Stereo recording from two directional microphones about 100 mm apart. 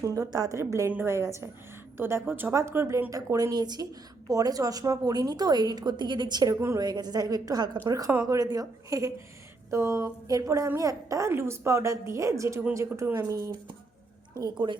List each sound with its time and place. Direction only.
0.0 s a woman's voice: 35° right (ahead or behind)
6.5 s a woman's voice: 30° right (ahead or behind)
6.8 s a woman's voice: 45° right (ahead or behind)